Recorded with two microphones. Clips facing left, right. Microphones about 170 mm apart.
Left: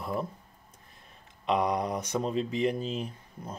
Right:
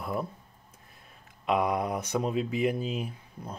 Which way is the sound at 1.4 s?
5° right (ahead or behind).